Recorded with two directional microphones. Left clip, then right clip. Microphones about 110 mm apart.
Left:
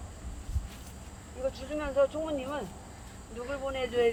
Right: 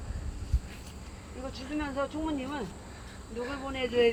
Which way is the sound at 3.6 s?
30° left (ahead or behind).